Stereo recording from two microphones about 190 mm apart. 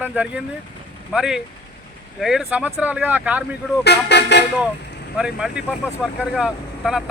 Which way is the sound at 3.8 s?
65° left (ahead or behind).